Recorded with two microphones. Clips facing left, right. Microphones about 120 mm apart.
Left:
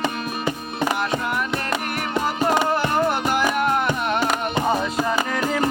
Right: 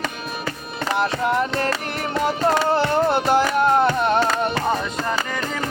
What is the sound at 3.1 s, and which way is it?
Music, 30° right (ahead or behind).